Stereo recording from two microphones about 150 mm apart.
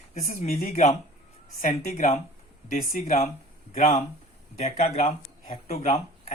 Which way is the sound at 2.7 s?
60° left (ahead or behind).